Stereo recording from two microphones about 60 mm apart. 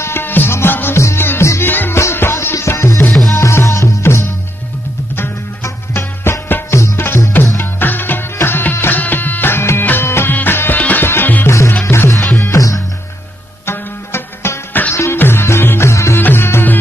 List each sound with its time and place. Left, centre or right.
0.0 s music: left
11.8 s music: left
12.4 s music: left
13.7 s music: left
15.9 s music: left
16.2 s music: left